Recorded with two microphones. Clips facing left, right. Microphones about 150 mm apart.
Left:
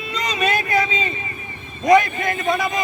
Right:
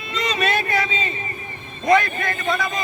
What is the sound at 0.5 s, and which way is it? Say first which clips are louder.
A man's voice: left 2 dB; 10° left (ahead or behind).